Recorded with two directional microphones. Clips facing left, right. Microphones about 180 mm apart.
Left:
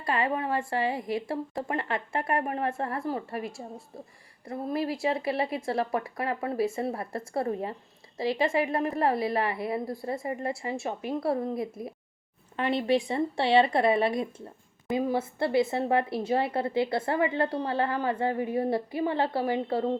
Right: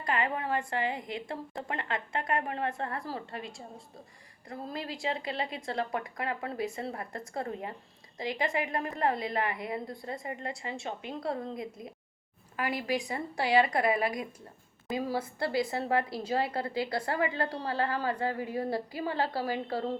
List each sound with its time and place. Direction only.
0.2 s a woman's voice: 25° left (ahead or behind)
0.8 s a woman's voice: 20° right (ahead or behind)
1.3 s a woman's voice: 25° left (ahead or behind)
12.5 s a woman's voice: 25° left (ahead or behind)